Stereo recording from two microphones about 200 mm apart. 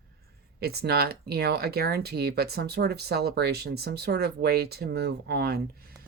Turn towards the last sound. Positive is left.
turn(degrees=-50)  # may be behind; listen again after turning